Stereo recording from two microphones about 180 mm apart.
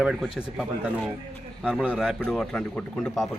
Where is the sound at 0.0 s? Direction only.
5° right (ahead or behind).